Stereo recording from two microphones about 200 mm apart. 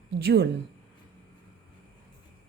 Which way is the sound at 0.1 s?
55° right (ahead or behind).